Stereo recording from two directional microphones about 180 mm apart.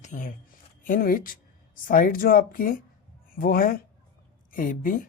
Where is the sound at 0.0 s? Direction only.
45° left (ahead or behind).